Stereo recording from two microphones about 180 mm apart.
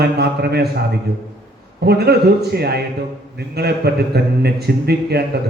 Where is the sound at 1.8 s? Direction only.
60° right (ahead or behind).